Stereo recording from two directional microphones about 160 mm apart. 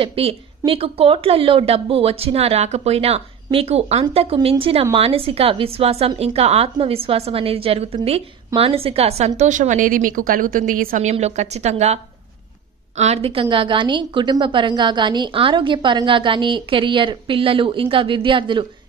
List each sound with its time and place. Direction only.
0.0 s a woman's voice: 35° right (ahead or behind)